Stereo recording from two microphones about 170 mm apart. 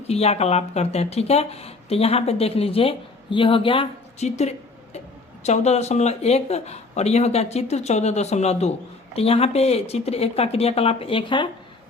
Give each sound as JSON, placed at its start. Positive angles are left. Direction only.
{"t": 0.1, "sound": "speech", "side_deg": 40}